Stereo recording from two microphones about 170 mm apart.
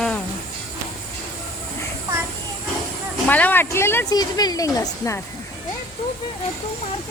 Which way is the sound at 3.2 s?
10° left (ahead or behind).